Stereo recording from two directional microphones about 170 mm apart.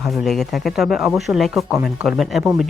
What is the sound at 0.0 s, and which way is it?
Speech, centre (ahead or behind).